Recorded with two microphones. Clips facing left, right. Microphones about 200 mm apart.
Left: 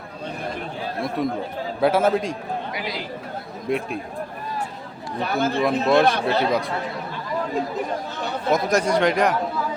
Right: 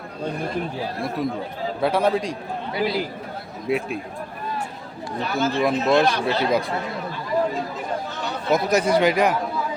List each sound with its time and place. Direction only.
1.2 s speech: centre (ahead or behind)
2.7 s a man's voice: 30° right (ahead or behind)
3.7 s speech: centre (ahead or behind)
5.3 s speech: 55° left (ahead or behind)
5.5 s speech: centre (ahead or behind)
6.1 s speech: 55° left (ahead or behind)
6.4 s speech: centre (ahead or behind)
8.4 s speech: centre (ahead or behind)